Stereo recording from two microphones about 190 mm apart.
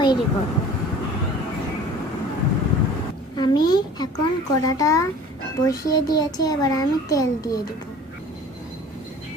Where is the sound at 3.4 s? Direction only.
20° left (ahead or behind).